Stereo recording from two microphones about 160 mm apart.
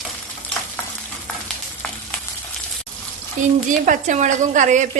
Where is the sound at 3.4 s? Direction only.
50° right (ahead or behind).